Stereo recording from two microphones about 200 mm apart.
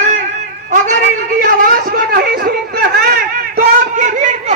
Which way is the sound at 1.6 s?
45° right (ahead or behind).